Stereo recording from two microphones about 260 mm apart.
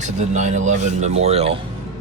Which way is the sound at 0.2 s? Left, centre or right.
Right.